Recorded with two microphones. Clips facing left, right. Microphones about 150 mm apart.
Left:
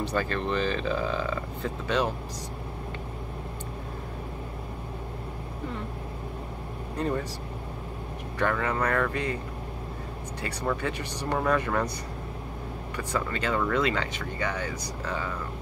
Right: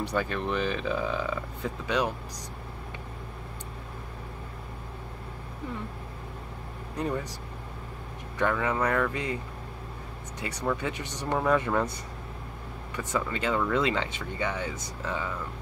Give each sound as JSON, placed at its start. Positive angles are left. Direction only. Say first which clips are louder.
{"t": 0.0, "sound": "speech", "louder": "left 1 dB", "side_deg": -15}
{"t": 7.0, "sound": "speech", "louder": "left 2 dB", "side_deg": -15}
{"t": 8.4, "sound": "speech", "louder": "even", "side_deg": -15}
{"t": 10.8, "sound": "speech", "louder": "left 2 dB", "side_deg": -20}
{"t": 12.9, "sound": "speech", "louder": "even", "side_deg": -20}